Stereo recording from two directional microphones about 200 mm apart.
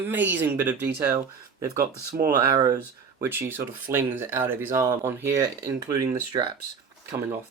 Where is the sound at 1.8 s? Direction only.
50° right (ahead or behind).